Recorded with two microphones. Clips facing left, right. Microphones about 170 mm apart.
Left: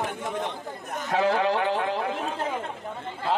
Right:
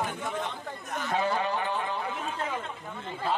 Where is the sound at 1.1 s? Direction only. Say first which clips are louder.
Left 6 dB; 85° left.